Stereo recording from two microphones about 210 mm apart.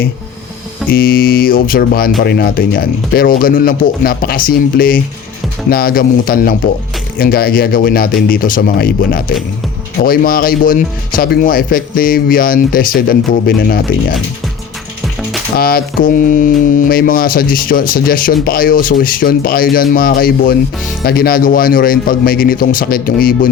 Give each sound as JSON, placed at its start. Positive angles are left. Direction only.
{"t": 0.9, "sound": "music", "side_deg": 45}
{"t": 15.5, "sound": "music", "side_deg": 45}